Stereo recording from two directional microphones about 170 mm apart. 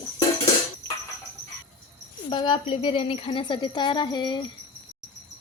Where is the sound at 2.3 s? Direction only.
25° left (ahead or behind).